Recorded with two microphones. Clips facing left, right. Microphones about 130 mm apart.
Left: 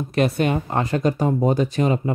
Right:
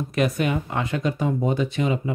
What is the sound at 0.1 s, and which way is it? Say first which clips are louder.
Speech: left 3 dB; 30° left (ahead or behind).